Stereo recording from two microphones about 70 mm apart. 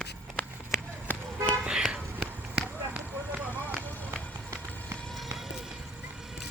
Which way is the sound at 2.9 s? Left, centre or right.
Right.